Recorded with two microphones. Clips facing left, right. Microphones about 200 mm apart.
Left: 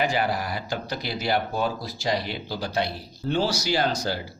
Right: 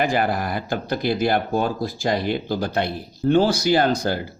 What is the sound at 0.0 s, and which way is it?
Speech, 50° right (ahead or behind).